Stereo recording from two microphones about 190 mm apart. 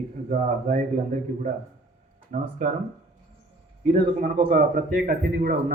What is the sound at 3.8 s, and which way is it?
A man's voice, 45° right (ahead or behind).